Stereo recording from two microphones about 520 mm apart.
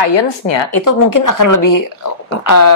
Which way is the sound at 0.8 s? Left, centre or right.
Left.